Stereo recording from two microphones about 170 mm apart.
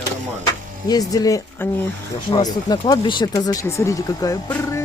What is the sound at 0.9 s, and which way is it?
Speech, 20° left (ahead or behind).